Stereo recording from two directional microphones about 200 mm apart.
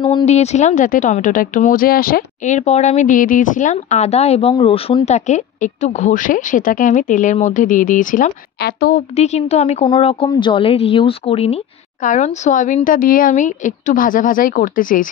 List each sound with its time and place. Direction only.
0.0 s speech: 30° left (ahead or behind); by 9.0 s 45° left (ahead or behind)
9.1 s speech: 30° left (ahead or behind)